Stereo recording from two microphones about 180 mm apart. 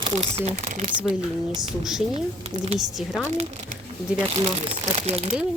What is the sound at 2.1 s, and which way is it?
Speech, 35° right (ahead or behind).